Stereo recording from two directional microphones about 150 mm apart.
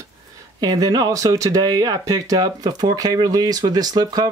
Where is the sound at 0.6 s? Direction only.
25° right (ahead or behind).